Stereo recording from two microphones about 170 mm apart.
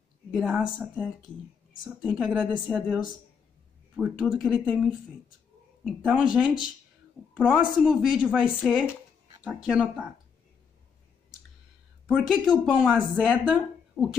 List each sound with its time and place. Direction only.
0.3 s speech: centre (ahead or behind)
2.0 s speech: 5° right (ahead or behind)
4.0 s speech: 5° right (ahead or behind)
5.9 s speech: 5° right (ahead or behind)
12.1 s speech: centre (ahead or behind)